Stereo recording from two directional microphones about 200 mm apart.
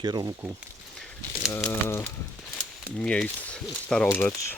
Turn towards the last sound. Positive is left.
turn(degrees=10)  # may be behind; listen again after turning